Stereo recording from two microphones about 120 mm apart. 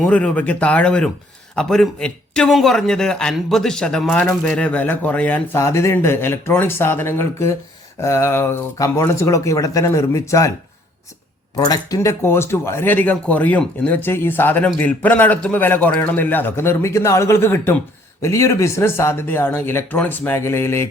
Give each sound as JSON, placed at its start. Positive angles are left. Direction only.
{"t": 0.0, "sound": "a man's voice", "side_deg": 10}
{"t": 11.5, "sound": "a man's voice", "side_deg": 35}